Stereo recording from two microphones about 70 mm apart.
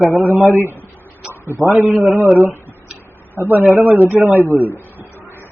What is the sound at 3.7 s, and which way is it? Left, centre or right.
Speech, right.